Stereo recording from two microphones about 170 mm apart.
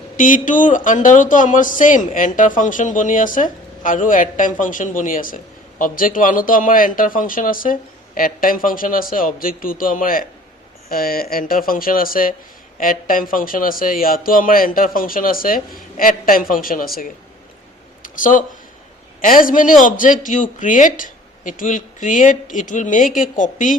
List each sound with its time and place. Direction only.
0.2 s a man's voice: 50° left (ahead or behind)
18.0 s a sound: 50° left (ahead or behind)
19.2 s speech: 55° left (ahead or behind)